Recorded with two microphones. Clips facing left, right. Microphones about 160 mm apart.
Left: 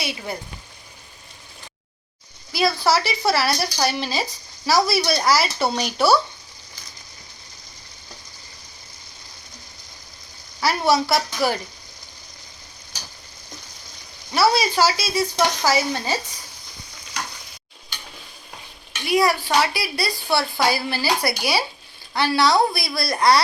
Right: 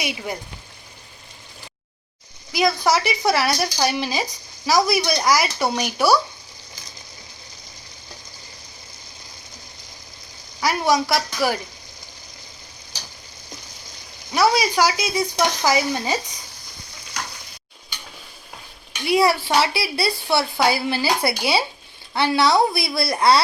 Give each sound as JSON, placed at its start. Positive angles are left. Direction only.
{"t": 0.0, "sound": "speech", "side_deg": -15}
{"t": 2.5, "sound": "speech", "side_deg": -15}
{"t": 10.6, "sound": "a woman's voice", "side_deg": -15}
{"t": 14.3, "sound": "speech", "side_deg": -15}
{"t": 19.0, "sound": "speech", "side_deg": -25}